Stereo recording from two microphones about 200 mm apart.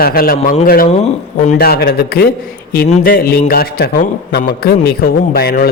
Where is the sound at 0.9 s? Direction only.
35° left (ahead or behind).